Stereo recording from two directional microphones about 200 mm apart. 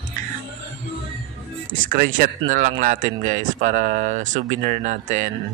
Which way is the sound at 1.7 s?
45° right (ahead or behind).